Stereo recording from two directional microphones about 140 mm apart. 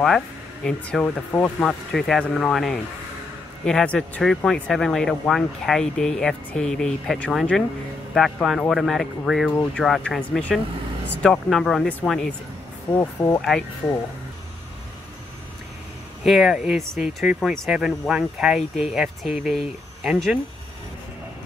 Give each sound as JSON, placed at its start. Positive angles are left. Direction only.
{"t": 0.7, "sound": "speech", "side_deg": 5}
{"t": 12.9, "sound": "speech", "side_deg": 20}
{"t": 13.4, "sound": "speech", "side_deg": 0}
{"t": 16.3, "sound": "speech", "side_deg": -5}